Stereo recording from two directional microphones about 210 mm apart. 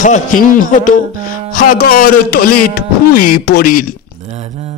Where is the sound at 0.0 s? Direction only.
40° left (ahead or behind).